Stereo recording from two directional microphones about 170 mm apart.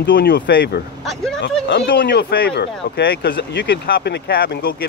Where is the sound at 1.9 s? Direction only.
65° left (ahead or behind).